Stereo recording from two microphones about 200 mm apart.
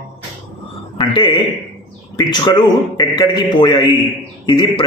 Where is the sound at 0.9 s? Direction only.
25° left (ahead or behind).